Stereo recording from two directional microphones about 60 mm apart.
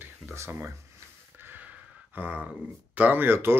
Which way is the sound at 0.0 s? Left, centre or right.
Right.